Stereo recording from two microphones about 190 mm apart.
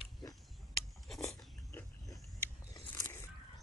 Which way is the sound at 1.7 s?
15° left (ahead or behind).